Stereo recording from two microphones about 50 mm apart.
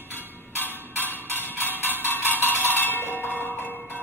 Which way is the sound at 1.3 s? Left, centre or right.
Left.